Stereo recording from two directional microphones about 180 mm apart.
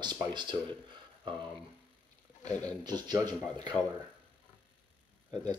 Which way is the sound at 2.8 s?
25° right (ahead or behind).